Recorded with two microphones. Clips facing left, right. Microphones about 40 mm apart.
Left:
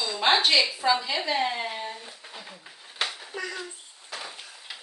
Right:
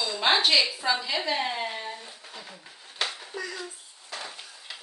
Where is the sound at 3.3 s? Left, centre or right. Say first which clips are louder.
Left 2 dB; left.